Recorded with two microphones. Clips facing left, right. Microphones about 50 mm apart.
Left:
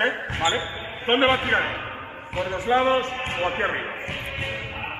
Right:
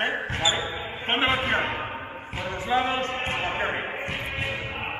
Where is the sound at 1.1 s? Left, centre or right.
Left.